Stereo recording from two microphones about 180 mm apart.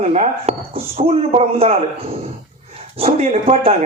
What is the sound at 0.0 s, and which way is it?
Speech, 35° right (ahead or behind).